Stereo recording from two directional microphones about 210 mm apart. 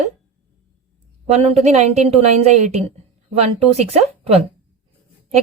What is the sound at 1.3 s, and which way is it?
Speech, 30° right (ahead or behind).